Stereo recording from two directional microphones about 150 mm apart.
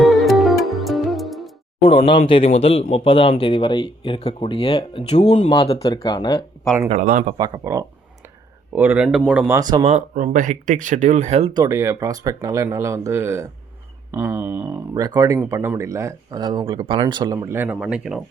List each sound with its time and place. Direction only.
0.0 s music: centre (ahead or behind)
1.8 s speech: 40° left (ahead or behind)
5.0 s speech: 45° left (ahead or behind)
5.8 s speech: 30° left (ahead or behind)
7.3 s speech: 25° right (ahead or behind)
8.7 s speech: 5° right (ahead or behind)
9.5 s speech: 25° right (ahead or behind)
9.8 s speech: 55° right (ahead or behind)
11.5 s speech: 25° right (ahead or behind)
14.9 s speech: 25° right (ahead or behind)
17.3 s speech: 15° right (ahead or behind)